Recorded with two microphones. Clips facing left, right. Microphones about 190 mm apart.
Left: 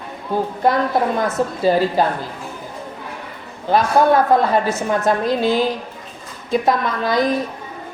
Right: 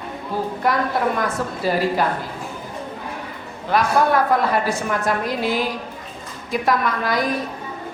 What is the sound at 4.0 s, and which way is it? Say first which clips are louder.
A woman's voice: left 5 dB; 25° left (ahead or behind).